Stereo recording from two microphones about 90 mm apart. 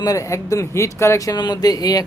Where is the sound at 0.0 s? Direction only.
40° left (ahead or behind).